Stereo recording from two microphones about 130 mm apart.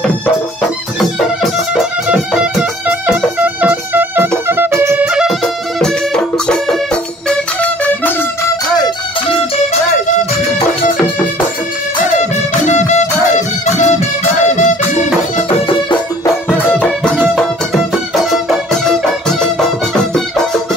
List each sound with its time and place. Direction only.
1.4 s music: 5° right (ahead or behind)
3.9 s violin: 15° right (ahead or behind)
4.5 s music: 15° right (ahead or behind)
5.0 s music: 5° right (ahead or behind)
12.0 s music: 65° left (ahead or behind)
16.5 s music: 15° left (ahead or behind)